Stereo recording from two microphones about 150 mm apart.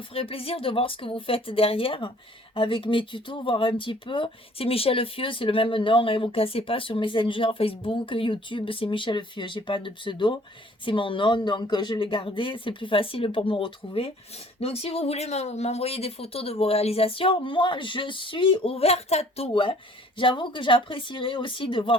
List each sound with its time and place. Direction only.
0.1 s speech: 40° left (ahead or behind)